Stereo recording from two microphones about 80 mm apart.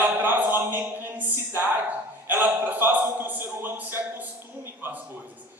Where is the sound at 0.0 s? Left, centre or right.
Right.